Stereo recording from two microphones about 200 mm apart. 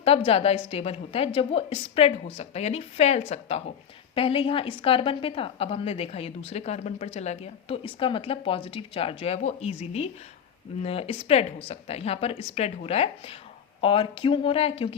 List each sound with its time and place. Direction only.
0.3 s a woman's voice: 30° left (ahead or behind)